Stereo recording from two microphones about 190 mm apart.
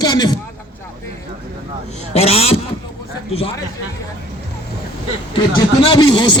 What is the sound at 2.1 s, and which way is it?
Speech, 35° left (ahead or behind).